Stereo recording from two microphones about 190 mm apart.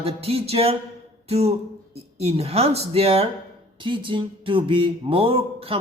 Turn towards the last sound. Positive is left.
turn(degrees=-30)  # may be behind; listen again after turning